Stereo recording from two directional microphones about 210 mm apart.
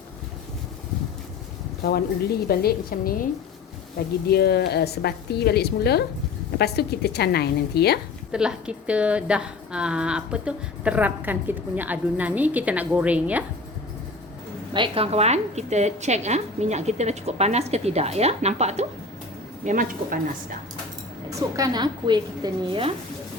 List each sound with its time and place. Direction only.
1.8 s a woman's voice: 50° left (ahead or behind)
4.3 s a woman's voice: 50° left (ahead or behind)
8.3 s a woman's voice: 5° right (ahead or behind)
14.7 s a woman's voice: 25° right (ahead or behind); by 20.6 s 40° right (ahead or behind)
21.2 s a woman's voice: 15° right (ahead or behind)